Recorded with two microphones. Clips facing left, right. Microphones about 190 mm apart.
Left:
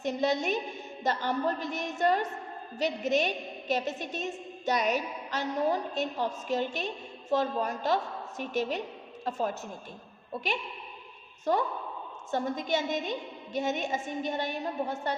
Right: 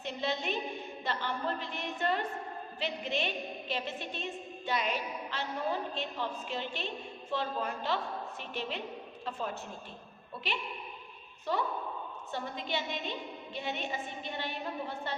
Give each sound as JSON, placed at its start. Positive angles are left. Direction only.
{"t": 0.0, "sound": "a woman's voice", "side_deg": 45}
{"t": 10.3, "sound": "a woman's voice", "side_deg": 45}